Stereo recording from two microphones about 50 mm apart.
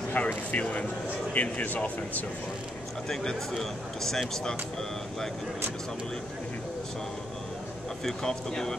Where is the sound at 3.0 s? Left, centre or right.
Centre.